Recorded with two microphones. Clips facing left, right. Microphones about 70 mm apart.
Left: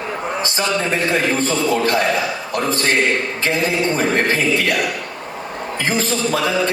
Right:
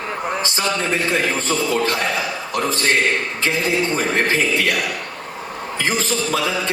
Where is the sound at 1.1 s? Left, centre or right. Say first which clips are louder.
Left 2 dB; left.